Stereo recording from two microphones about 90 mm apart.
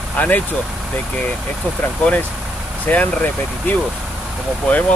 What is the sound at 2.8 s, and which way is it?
Speech, 20° left (ahead or behind).